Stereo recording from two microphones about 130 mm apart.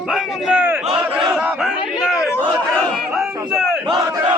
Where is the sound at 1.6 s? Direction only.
Centre (ahead or behind).